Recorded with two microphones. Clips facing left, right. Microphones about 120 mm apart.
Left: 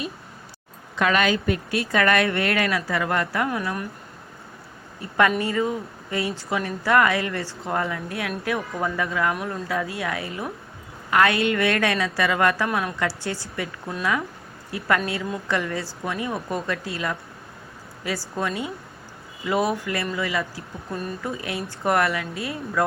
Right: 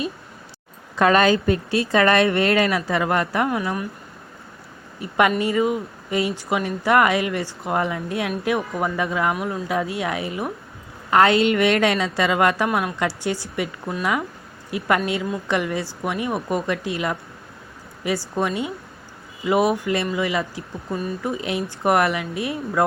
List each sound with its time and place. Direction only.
0.9 s a woman's voice: 40° right (ahead or behind); by 3.6 s 20° right (ahead or behind)
4.9 s a woman's voice: 20° right (ahead or behind)
9.3 s speech: 5° right (ahead or behind)
9.6 s a woman's voice: 20° right (ahead or behind)
12.6 s speech: 5° right (ahead or behind)
13.0 s a woman's voice: 15° right (ahead or behind)
20.9 s speech: centre (ahead or behind)
21.2 s a woman's voice: 20° right (ahead or behind)